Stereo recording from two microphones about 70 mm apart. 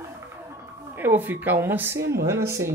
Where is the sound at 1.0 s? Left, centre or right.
Right.